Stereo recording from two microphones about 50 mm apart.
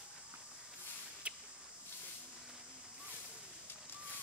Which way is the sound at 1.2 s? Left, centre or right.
Right.